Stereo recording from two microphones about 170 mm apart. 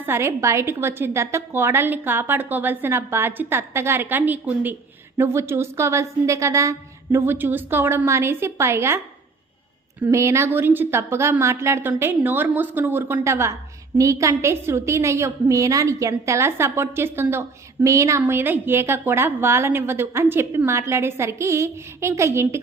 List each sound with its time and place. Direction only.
0.0 s a woman's voice: 15° right (ahead or behind)
10.0 s a woman's voice: 15° right (ahead or behind)